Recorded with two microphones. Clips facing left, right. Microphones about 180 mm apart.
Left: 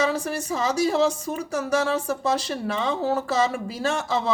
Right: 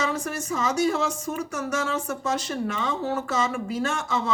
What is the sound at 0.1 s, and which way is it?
Speech, 35° left (ahead or behind).